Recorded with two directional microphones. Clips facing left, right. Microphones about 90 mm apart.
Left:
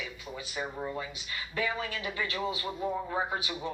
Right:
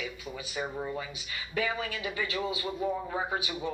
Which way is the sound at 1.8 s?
40° left (ahead or behind).